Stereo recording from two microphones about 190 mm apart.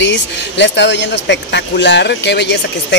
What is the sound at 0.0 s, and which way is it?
Speech, 70° left (ahead or behind).